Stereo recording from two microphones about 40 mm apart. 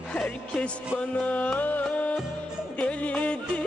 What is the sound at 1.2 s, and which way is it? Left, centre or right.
Music, left.